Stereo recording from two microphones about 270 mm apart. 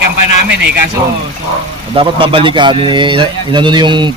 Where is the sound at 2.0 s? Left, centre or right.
Centre.